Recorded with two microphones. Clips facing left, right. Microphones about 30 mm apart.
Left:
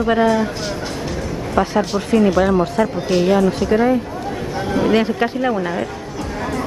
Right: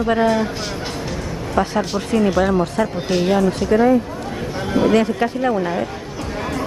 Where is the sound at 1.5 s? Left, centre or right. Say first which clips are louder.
Left 2 dB; centre.